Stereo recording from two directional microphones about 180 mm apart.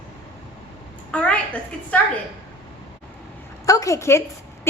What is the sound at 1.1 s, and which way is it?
Speech, 5° left (ahead or behind).